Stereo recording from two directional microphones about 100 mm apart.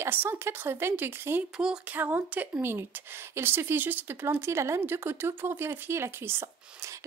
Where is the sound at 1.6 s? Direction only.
10° right (ahead or behind).